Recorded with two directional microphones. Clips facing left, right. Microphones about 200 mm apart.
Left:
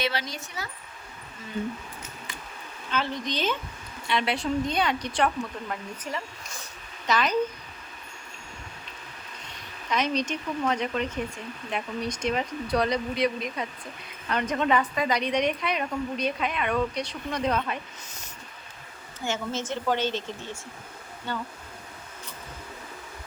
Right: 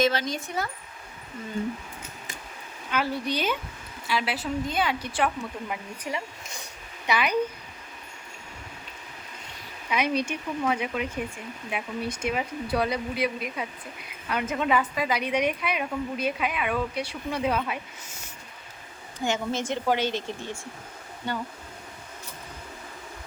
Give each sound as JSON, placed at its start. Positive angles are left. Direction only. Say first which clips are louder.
{"t": 0.0, "sound": "speech", "louder": "right 6 dB", "side_deg": -45}
{"t": 2.9, "sound": "a woman's voice", "louder": "right 2 dB", "side_deg": -10}
{"t": 9.9, "sound": "a woman's voice", "louder": "even", "side_deg": -10}
{"t": 19.2, "sound": "a woman's voice", "louder": "right 3 dB", "side_deg": -15}